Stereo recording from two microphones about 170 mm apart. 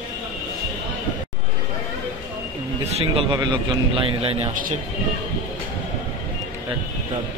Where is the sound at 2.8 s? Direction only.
35° right (ahead or behind).